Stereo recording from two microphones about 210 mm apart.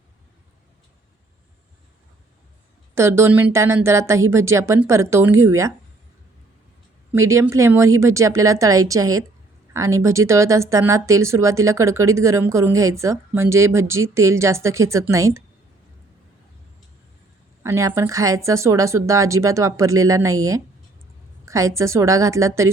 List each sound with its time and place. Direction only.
2.9 s speech: 10° right (ahead or behind)
7.1 s speech: 15° right (ahead or behind)
17.6 s speech: 15° right (ahead or behind)
21.4 s a sound: 15° right (ahead or behind)
21.8 s speech: 15° right (ahead or behind)